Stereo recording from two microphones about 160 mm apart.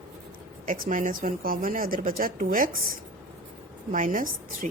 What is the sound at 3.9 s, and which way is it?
Speech, 55° right (ahead or behind).